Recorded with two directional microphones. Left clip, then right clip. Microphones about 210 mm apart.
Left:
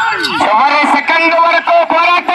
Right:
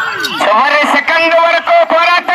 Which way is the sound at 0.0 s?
Centre (ahead or behind).